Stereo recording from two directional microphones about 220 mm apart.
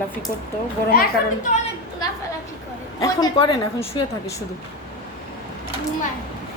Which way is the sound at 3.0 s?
20° left (ahead or behind).